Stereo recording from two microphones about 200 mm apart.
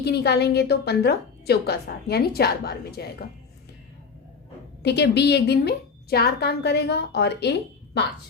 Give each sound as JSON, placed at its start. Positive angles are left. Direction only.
{"t": 0.0, "sound": "a woman's voice", "side_deg": 55}
{"t": 4.8, "sound": "a woman's voice", "side_deg": 55}